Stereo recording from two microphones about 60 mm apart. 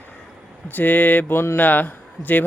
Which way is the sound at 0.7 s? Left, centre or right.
Left.